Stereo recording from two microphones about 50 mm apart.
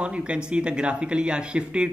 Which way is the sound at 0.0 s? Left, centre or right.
Right.